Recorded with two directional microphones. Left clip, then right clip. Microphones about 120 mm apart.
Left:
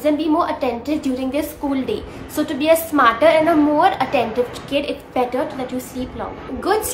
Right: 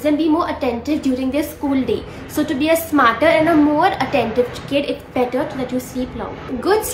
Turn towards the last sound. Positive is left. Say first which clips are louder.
# right 2 dB
turn(degrees=30)  # may be behind; listen again after turning